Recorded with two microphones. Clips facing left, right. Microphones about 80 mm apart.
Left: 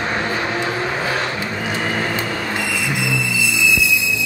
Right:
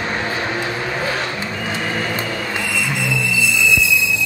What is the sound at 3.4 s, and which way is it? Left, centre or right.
Music, centre.